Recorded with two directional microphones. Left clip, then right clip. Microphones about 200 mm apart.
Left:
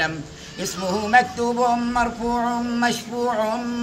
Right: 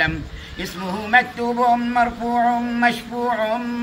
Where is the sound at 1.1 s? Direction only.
25° left (ahead or behind).